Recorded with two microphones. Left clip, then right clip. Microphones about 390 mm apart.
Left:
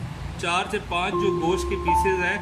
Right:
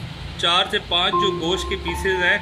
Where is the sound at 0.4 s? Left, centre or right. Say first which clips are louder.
Right 6 dB; centre.